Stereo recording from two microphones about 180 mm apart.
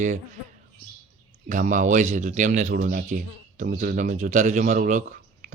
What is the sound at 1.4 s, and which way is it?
Speech, 45° right (ahead or behind).